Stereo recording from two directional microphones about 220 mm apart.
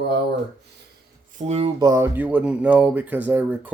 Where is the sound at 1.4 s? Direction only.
30° right (ahead or behind).